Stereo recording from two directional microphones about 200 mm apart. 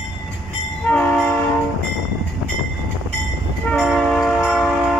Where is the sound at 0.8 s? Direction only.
5° left (ahead or behind).